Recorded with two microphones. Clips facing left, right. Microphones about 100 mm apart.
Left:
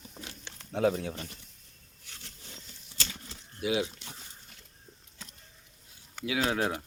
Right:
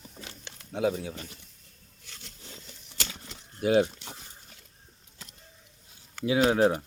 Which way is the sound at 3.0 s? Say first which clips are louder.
Right 1 dB; 55° right (ahead or behind).